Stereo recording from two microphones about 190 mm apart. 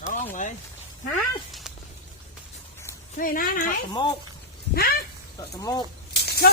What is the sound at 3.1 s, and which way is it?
Speech, 45° left (ahead or behind).